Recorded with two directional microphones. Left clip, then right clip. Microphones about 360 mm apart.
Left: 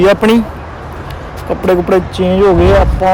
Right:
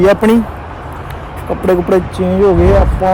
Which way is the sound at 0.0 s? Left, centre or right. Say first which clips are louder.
Left 1 dB; centre.